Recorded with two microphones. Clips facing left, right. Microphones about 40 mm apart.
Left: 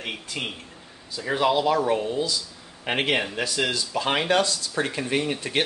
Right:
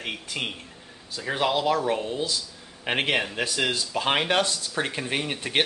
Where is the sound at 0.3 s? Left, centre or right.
Centre.